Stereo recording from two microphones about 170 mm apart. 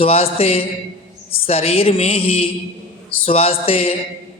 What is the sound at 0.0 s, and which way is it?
Speech, 35° left (ahead or behind).